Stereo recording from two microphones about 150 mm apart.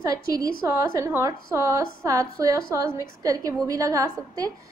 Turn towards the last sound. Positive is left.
turn(degrees=-20)  # may be behind; listen again after turning